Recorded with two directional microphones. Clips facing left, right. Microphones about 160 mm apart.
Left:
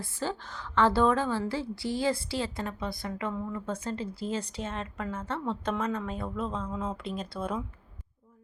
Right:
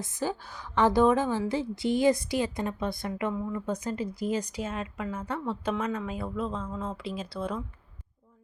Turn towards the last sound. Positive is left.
turn(degrees=0)  # may be behind; listen again after turning